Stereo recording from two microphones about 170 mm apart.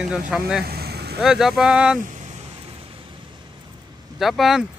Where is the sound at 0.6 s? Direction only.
70° right (ahead or behind).